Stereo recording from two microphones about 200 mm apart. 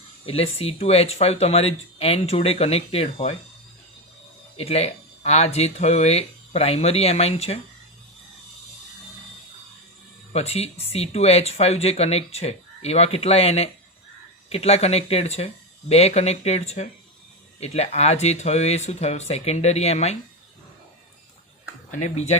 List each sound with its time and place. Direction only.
0.3 s speech: 30° left (ahead or behind)
4.5 s speech: 30° left (ahead or behind)
10.3 s speech: 30° left (ahead or behind)
22.0 s speech: 35° left (ahead or behind)